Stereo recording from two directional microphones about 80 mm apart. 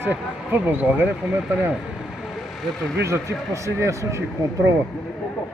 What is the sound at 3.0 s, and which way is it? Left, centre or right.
Speech, right.